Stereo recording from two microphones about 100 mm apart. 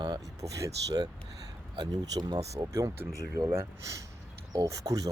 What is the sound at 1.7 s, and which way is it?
Speech, 45° right (ahead or behind).